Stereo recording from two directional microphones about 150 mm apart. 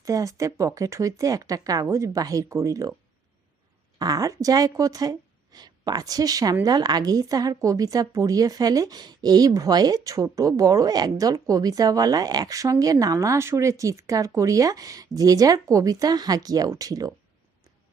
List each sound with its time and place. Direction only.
0.0 s a woman's voice: 20° right (ahead or behind)
3.9 s a woman's voice: 25° right (ahead or behind)